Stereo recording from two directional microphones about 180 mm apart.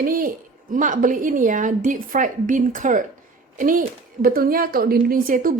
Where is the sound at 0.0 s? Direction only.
50° right (ahead or behind).